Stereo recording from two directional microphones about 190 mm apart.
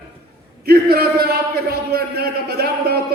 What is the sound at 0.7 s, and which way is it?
A man's voice, 55° right (ahead or behind).